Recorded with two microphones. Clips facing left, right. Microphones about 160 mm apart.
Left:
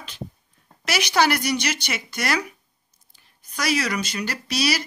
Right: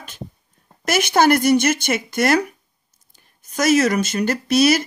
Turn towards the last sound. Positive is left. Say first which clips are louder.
# right 9 dB
turn(degrees=-50)  # may be behind; listen again after turning